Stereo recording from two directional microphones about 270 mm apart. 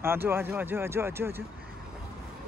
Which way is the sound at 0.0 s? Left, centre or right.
Centre.